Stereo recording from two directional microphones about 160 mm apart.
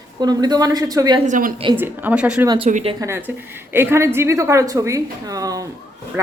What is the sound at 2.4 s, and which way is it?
Speech, 30° right (ahead or behind).